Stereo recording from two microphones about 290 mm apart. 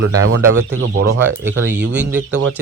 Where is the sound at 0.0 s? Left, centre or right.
Right.